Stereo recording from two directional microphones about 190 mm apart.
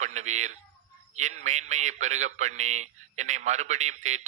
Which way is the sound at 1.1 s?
35° right (ahead or behind).